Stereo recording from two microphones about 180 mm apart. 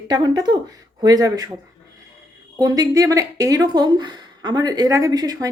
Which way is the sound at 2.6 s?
20° right (ahead or behind).